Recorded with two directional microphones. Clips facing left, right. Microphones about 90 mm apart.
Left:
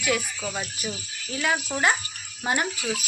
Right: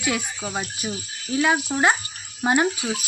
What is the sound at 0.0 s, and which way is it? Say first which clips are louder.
Speech: even; 25° right (ahead or behind).